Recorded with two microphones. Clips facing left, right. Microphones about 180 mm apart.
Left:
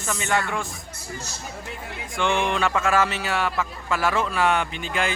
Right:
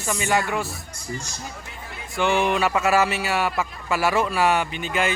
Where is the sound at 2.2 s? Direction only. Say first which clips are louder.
Right 2 dB; 5° right (ahead or behind).